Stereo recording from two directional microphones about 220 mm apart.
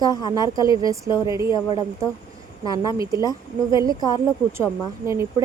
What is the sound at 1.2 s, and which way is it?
Speech, 15° right (ahead or behind).